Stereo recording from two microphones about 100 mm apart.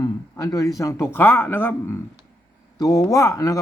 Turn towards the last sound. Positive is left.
turn(degrees=35)  # may be behind; listen again after turning